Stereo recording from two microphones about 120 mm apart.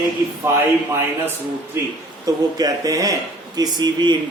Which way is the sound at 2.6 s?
30° right (ahead or behind).